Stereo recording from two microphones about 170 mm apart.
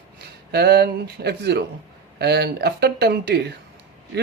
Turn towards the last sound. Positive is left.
turn(degrees=-75)  # may be behind; listen again after turning